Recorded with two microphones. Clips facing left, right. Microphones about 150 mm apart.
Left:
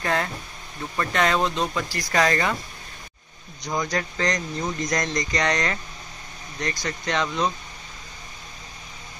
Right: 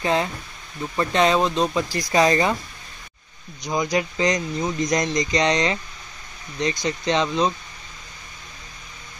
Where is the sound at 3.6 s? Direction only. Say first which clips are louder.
Right 4 dB; 15° right (ahead or behind).